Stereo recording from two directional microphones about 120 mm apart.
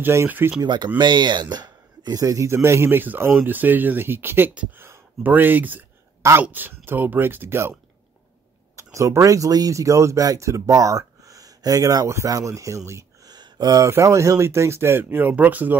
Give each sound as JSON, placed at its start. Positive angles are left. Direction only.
{"t": 0.0, "sound": "speech", "side_deg": -20}
{"t": 0.6, "sound": "speech", "side_deg": -40}
{"t": 8.7, "sound": "speech", "side_deg": -25}